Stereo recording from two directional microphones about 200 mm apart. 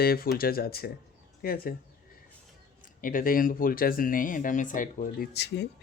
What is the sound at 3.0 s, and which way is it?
Speech, 45° left (ahead or behind).